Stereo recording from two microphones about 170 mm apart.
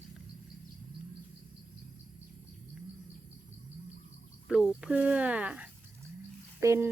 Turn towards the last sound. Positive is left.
turn(degrees=-15)  # may be behind; listen again after turning